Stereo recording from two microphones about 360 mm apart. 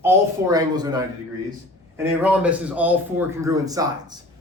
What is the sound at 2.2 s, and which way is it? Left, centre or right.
Speech, centre.